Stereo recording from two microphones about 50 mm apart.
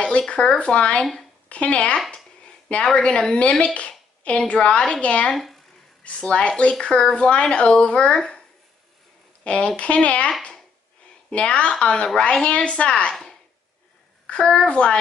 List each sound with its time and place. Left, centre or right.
0.3 s speech: left
2.0 s a sound: left
3.3 s speech: centre
5.3 s a woman's voice: centre
6.0 s a woman's voice: left
14.2 s speech: left